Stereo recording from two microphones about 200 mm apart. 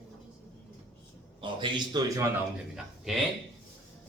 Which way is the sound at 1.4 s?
25° right (ahead or behind).